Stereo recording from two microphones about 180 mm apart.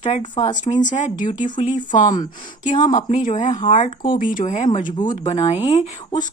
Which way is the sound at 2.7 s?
25° left (ahead or behind).